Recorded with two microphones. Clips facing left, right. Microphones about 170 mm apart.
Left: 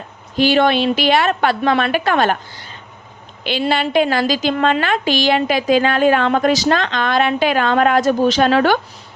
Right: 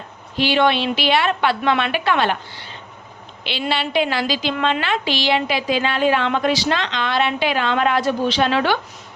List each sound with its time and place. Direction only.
0.3 s a woman's voice: 45° left (ahead or behind)
3.7 s a woman's voice: 45° left (ahead or behind)